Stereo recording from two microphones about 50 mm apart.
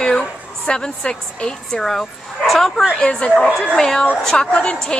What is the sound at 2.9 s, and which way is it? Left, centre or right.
A woman's voice, centre.